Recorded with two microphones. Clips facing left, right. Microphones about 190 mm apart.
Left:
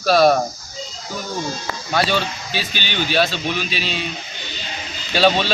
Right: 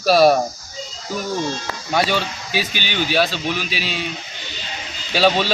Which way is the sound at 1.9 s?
15° right (ahead or behind).